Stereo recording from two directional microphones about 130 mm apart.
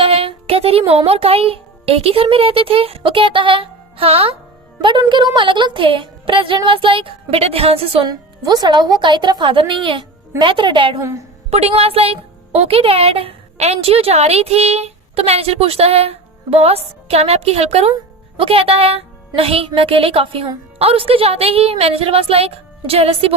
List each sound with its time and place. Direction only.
0.0 s speech: 45° right (ahead or behind)
4.8 s a woman's voice: 35° right (ahead or behind)
8.0 s speech: 30° right (ahead or behind)
11.5 s a woman's voice: 50° right (ahead or behind)